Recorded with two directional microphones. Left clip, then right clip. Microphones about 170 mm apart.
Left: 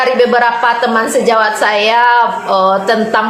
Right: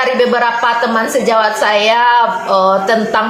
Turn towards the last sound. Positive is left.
turn(degrees=25)  # may be behind; listen again after turning